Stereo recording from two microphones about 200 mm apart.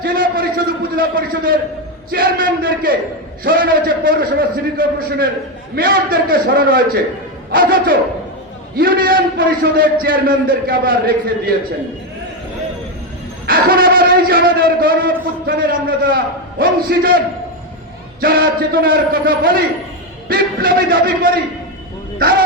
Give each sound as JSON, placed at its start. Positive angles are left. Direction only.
{"t": 0.0, "sound": "a man's voice", "side_deg": -45}
{"t": 13.5, "sound": "a man's voice", "side_deg": -45}
{"t": 18.2, "sound": "a man's voice", "side_deg": -45}